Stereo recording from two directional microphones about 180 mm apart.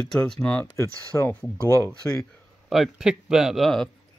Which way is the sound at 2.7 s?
Centre (ahead or behind).